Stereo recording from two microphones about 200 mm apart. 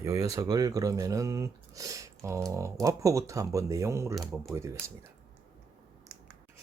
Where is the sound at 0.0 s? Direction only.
15° right (ahead or behind).